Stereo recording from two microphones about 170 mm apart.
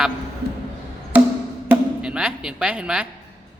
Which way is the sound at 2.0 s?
5° right (ahead or behind).